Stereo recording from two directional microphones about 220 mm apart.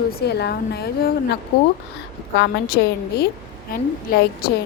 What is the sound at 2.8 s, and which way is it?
A woman's voice, 45° left (ahead or behind).